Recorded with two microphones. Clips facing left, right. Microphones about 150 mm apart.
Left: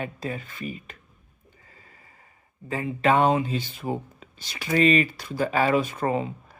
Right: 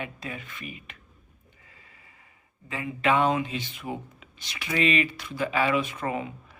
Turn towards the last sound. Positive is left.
turn(degrees=35)  # may be behind; listen again after turning